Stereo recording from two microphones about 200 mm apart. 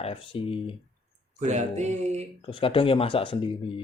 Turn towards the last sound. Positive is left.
turn(degrees=25)  # may be behind; listen again after turning